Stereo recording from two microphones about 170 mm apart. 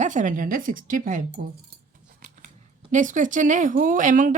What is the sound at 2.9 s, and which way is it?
A woman's voice, 50° right (ahead or behind).